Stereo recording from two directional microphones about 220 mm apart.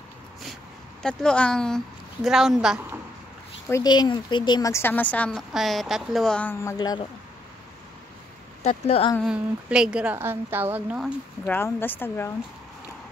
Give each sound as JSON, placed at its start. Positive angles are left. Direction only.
{"t": 1.0, "sound": "a woman's voice", "side_deg": 5}
{"t": 3.6, "sound": "speech", "side_deg": 15}
{"t": 8.6, "sound": "speech", "side_deg": 30}
{"t": 9.2, "sound": "a woman's voice", "side_deg": -5}
{"t": 11.4, "sound": "speech", "side_deg": 10}